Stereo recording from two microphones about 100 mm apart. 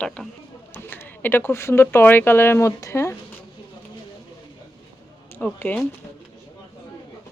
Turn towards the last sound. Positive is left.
turn(degrees=15)  # may be behind; listen again after turning